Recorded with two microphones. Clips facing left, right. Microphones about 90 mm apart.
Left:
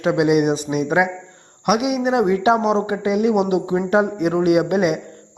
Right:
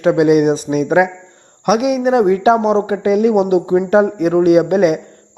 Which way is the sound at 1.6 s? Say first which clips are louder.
Right 4 dB; 35° right (ahead or behind).